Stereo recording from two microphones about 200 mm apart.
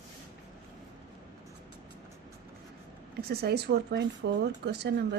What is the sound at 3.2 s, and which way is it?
Speech, 50° right (ahead or behind).